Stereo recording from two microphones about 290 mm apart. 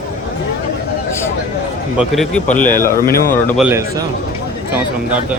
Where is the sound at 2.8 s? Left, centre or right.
Left.